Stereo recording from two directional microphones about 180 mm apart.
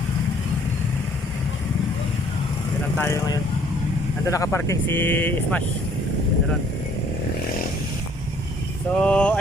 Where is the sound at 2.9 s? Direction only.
15° left (ahead or behind).